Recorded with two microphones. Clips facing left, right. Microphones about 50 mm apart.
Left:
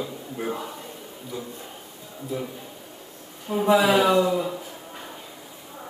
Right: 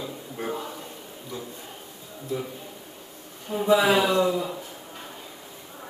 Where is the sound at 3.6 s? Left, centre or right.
Left.